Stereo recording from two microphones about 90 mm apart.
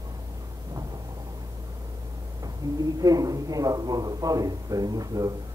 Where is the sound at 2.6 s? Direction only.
40° right (ahead or behind).